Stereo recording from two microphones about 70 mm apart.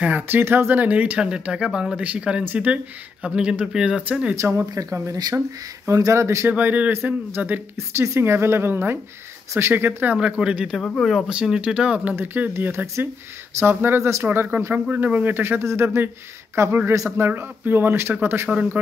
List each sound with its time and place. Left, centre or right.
0.0 s speech: right
4.4 s speech: right
6.5 s speech: right
7.7 s speech: right
10.1 s speech: centre
10.8 s speech: centre
11.2 s speech: centre
12.4 s speech: right
15.6 s speech: right
18.5 s speech: right